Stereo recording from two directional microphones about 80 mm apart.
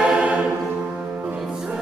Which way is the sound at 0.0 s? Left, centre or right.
Centre.